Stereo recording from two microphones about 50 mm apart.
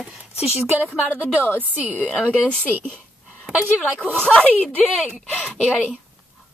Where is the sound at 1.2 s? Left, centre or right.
Left.